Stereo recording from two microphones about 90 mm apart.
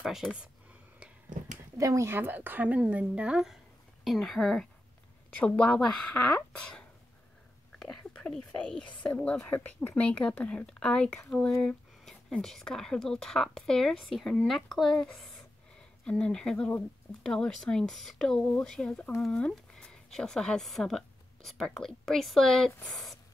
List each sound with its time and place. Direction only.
0.0 s speech: centre (ahead or behind)
1.8 s speech: 35° right (ahead or behind); by 3.5 s 10° right (ahead or behind)
4.0 s speech: centre (ahead or behind)
5.4 s speech: 15° left (ahead or behind)
7.8 s whispering: 10° left (ahead or behind)
9.0 s speech: 15° left (ahead or behind)